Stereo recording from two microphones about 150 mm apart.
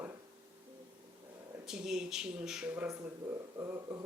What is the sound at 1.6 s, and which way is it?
Speech, 5° right (ahead or behind).